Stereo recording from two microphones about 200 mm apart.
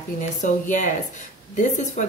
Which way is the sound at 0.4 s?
40° left (ahead or behind).